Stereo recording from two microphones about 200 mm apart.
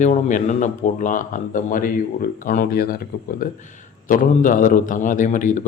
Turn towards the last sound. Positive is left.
turn(degrees=40)  # may be behind; listen again after turning